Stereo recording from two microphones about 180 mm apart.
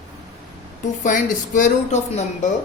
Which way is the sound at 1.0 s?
45° left (ahead or behind).